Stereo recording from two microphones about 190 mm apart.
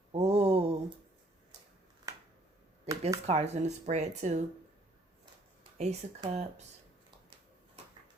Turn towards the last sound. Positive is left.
turn(degrees=-35)  # may be behind; listen again after turning